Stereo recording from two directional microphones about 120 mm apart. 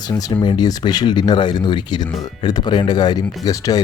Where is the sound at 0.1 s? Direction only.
35° left (ahead or behind).